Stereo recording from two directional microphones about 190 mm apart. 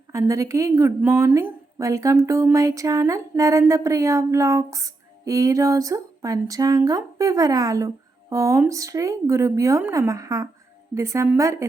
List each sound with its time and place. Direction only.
0.1 s a woman's voice: 15° right (ahead or behind)